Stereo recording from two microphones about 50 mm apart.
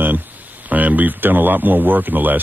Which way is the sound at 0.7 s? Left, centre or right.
Right.